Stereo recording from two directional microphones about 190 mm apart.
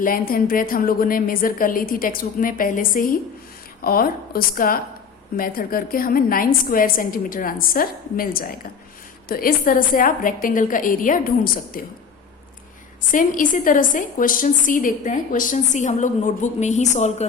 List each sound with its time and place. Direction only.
0.0 s a woman's voice: 50° left (ahead or behind)
13.1 s a woman's voice: 45° left (ahead or behind)